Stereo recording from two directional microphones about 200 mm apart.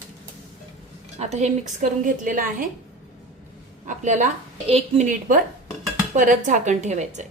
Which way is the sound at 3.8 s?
40° right (ahead or behind).